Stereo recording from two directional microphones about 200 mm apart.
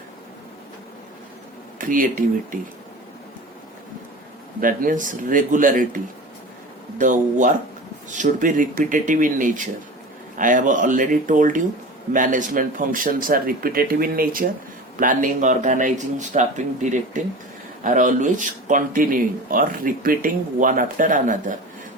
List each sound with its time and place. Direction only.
1.8 s speech: 45° right (ahead or behind)
4.6 s speech: 45° right (ahead or behind)
7.0 s speech: 40° right (ahead or behind)